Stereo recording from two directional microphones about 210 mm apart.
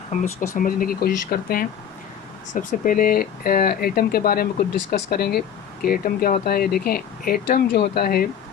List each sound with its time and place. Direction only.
0.1 s speech: 40° left (ahead or behind)